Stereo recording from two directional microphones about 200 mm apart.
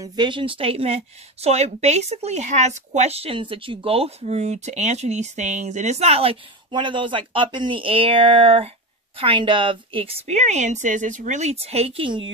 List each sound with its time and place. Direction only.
0.0 s a woman's voice: 20° right (ahead or behind)